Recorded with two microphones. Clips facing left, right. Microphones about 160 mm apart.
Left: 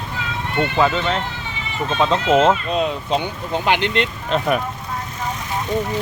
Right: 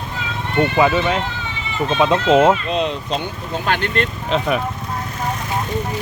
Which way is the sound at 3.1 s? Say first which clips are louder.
Left 2 dB; 15° left (ahead or behind).